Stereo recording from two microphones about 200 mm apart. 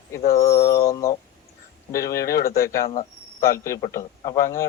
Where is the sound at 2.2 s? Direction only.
50° left (ahead or behind).